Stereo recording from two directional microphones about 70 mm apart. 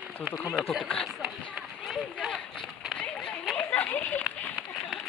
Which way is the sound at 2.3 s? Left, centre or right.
Centre.